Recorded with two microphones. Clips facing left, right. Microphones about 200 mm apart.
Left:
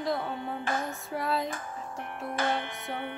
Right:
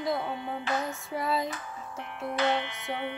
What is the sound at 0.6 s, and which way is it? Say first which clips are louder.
Music: right 1 dB; 50° left (ahead or behind).